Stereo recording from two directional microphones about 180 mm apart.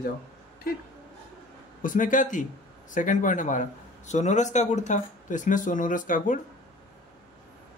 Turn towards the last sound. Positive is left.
turn(degrees=45)  # may be behind; listen again after turning